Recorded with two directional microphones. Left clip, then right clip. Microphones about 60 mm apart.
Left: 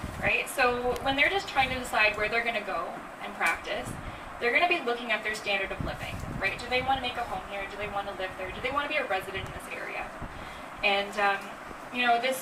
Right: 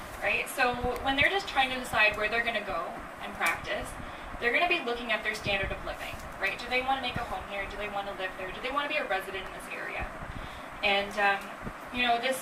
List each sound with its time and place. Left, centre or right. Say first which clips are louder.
0.2 s a sound: left 2 dB; right
1.0 s a woman's voice: right 1 dB; right
4.4 s a woman's voice: left 2 dB; right
10.8 s a woman's voice: even; right